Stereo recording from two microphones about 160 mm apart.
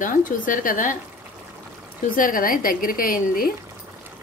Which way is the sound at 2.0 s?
60° left (ahead or behind).